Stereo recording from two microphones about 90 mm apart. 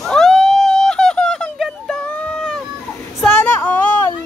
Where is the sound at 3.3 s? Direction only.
20° left (ahead or behind).